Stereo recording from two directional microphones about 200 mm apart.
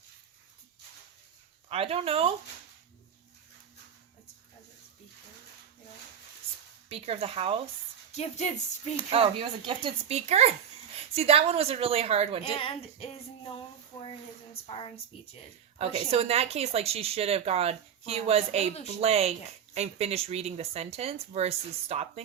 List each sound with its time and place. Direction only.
1.7 s speech: 30° right (ahead or behind)
6.8 s speech: 30° right (ahead or behind)
8.1 s speech: 35° left (ahead or behind)
9.0 s speech: 25° right (ahead or behind)
12.4 s speech: 25° left (ahead or behind)
13.9 s a sound: 15° left (ahead or behind)
14.7 s speech: 25° left (ahead or behind)
15.8 s speech: 30° right (ahead or behind)